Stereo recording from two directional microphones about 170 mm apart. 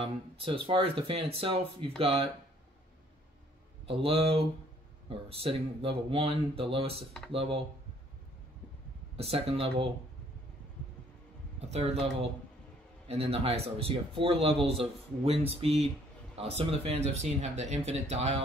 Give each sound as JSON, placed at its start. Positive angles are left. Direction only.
{"t": 0.7, "sound": "speech", "side_deg": -30}
{"t": 3.8, "sound": "speech", "side_deg": -35}
{"t": 9.1, "sound": "speech", "side_deg": -35}
{"t": 11.7, "sound": "speech", "side_deg": -35}